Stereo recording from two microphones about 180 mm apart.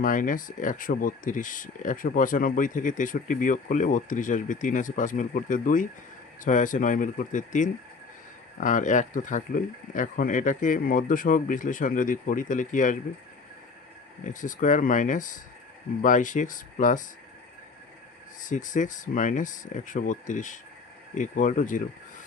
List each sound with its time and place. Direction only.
0.0 s speech: 45° left (ahead or behind)
14.3 s speech: 45° left (ahead or behind)
18.4 s speech: 45° left (ahead or behind)